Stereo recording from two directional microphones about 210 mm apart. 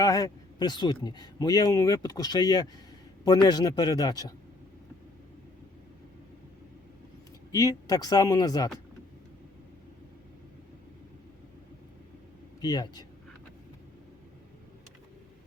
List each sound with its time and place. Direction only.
0.0 s speech: 15° left (ahead or behind)
7.5 s speech: 15° left (ahead or behind)
12.5 s speech: 20° left (ahead or behind)